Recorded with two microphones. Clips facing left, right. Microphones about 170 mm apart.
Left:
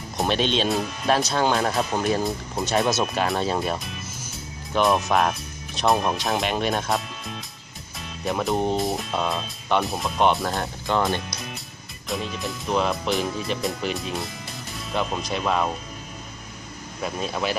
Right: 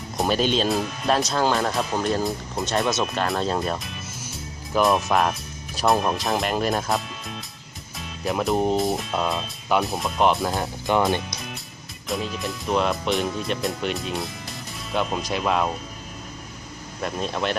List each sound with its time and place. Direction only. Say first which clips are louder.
0.2 s speech: right 1 dB; centre (ahead or behind)
10.9 s speech: right 2 dB; 15° right (ahead or behind)
12.0 s speech: right 1 dB; centre (ahead or behind)
17.0 s speech: right 1 dB; 5° left (ahead or behind)